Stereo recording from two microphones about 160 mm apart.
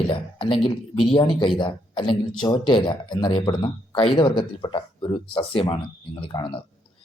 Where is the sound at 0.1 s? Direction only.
30° left (ahead or behind).